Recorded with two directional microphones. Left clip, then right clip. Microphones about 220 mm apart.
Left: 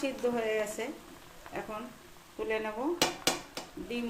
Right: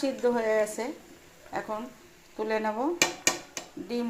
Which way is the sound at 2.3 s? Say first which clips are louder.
Right 4 dB; 20° right (ahead or behind).